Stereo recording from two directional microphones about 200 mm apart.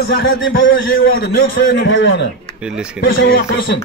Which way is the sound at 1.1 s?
50° left (ahead or behind).